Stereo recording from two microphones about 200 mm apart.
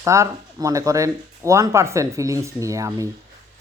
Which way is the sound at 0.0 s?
15° right (ahead or behind).